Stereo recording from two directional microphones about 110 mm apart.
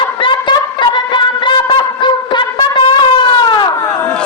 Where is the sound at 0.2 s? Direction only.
45° left (ahead or behind).